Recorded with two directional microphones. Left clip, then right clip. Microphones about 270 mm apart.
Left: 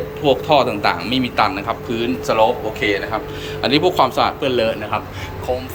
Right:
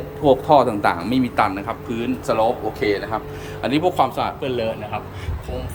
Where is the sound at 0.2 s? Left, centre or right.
Right.